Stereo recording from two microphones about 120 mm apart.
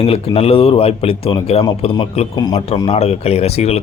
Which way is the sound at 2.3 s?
35° left (ahead or behind).